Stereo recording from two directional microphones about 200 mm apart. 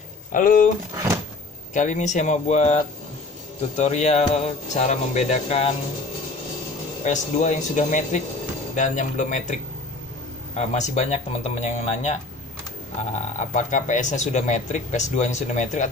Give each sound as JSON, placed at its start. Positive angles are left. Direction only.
{"t": 0.3, "sound": "speech", "side_deg": 45}
{"t": 1.7, "sound": "speech", "side_deg": 40}
{"t": 7.1, "sound": "speech", "side_deg": 35}